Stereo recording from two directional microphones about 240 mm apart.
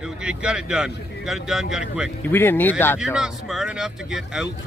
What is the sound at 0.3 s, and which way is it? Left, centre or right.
Speech, centre.